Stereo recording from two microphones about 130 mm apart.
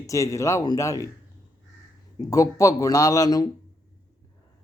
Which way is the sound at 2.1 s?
25° left (ahead or behind).